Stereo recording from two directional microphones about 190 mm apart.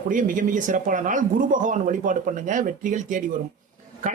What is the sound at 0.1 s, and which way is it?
Speech, 45° right (ahead or behind).